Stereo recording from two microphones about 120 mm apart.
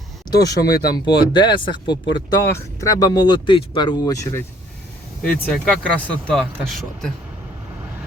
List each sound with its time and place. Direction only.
0.3 s speech: 30° left (ahead or behind)
2.5 s speech: 25° left (ahead or behind); by 3.9 s 40° left (ahead or behind)
4.0 s speech: 25° left (ahead or behind)
5.3 s speech: 5° left (ahead or behind)